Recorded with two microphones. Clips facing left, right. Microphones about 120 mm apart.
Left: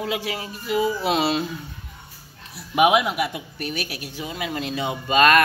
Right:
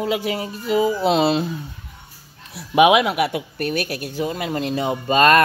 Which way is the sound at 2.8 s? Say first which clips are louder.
Right 4 dB; 90° right.